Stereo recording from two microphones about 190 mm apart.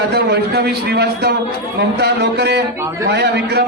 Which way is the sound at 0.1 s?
60° right (ahead or behind).